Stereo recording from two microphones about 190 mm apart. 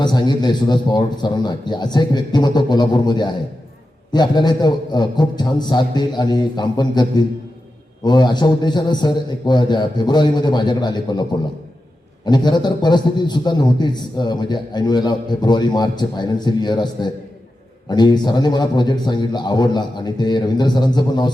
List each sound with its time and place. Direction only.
0.0 s a man's voice: 25° left (ahead or behind)